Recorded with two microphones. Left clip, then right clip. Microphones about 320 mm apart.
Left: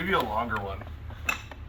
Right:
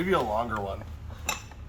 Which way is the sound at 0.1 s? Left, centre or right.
Right.